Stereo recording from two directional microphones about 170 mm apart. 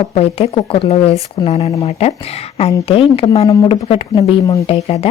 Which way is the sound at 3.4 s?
20° left (ahead or behind).